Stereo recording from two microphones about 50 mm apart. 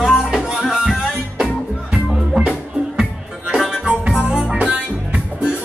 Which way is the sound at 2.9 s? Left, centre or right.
Centre.